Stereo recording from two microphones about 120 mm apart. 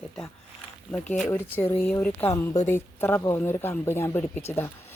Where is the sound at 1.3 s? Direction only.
20° left (ahead or behind).